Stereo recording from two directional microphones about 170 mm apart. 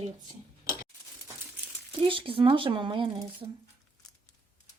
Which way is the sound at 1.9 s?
30° right (ahead or behind).